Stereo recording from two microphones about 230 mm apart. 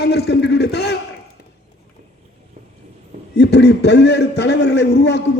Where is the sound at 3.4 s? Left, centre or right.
Left.